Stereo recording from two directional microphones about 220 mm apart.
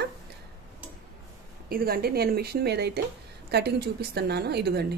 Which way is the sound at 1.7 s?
45° right (ahead or behind).